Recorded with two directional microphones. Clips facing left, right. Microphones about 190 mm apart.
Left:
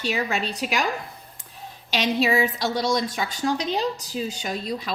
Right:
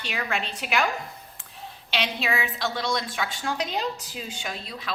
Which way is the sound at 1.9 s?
40° left (ahead or behind).